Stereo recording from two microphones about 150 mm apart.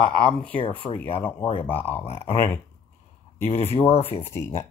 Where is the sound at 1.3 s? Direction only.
35° left (ahead or behind).